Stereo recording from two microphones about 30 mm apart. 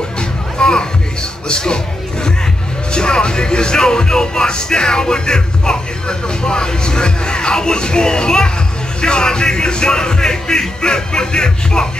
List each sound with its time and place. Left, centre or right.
0.6 s music: left
2.9 s speech: left